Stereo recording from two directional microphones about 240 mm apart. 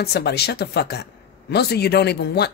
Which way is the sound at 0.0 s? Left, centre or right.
Left.